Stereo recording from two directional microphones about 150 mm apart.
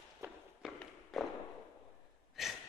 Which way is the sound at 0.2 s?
15° right (ahead or behind).